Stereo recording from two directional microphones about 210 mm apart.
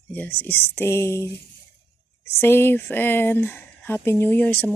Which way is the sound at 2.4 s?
10° left (ahead or behind).